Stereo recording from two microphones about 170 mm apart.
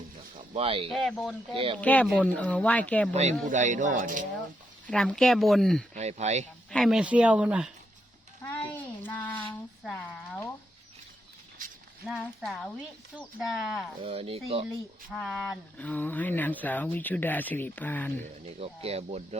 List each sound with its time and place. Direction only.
0.5 s speech: 35° right (ahead or behind)
0.9 s speech: centre (ahead or behind)
1.5 s speech: 35° right (ahead or behind)
1.8 s speech: 10° left (ahead or behind)
3.5 s speech: 45° right (ahead or behind)
4.9 s speech: 5° left (ahead or behind)
5.9 s speech: 40° right (ahead or behind)
6.7 s speech: centre (ahead or behind)
8.4 s a sound: 10° left (ahead or behind)
12.0 s speech: centre (ahead or behind)
14.0 s speech: 35° right (ahead or behind)
15.1 s speech: centre (ahead or behind)
15.8 s speech: 10° left (ahead or behind)
18.2 s speech: 35° right (ahead or behind)